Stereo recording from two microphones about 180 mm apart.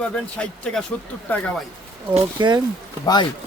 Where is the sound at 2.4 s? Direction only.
25° right (ahead or behind).